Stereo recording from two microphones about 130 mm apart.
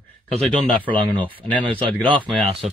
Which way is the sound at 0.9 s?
45° right (ahead or behind).